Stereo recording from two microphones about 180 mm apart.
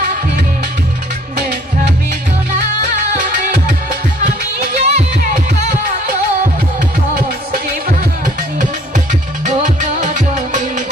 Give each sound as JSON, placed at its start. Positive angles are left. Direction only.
{"t": 3.3, "sound": "music", "side_deg": -50}
{"t": 9.6, "sound": "music", "side_deg": -45}